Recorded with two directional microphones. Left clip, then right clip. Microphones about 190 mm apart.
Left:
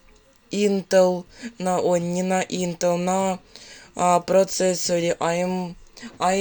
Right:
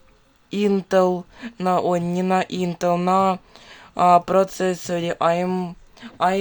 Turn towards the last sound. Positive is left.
turn(degrees=-15)  # may be behind; listen again after turning